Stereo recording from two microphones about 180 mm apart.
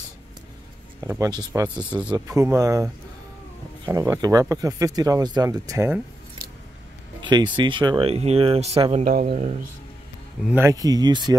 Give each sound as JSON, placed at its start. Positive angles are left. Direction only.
{"t": 1.0, "sound": "speech", "side_deg": -15}
{"t": 7.2, "sound": "speech", "side_deg": -25}
{"t": 10.5, "sound": "speech", "side_deg": -15}